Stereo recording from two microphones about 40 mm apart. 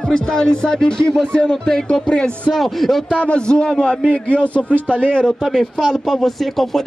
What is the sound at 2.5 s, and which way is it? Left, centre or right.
Speech, centre.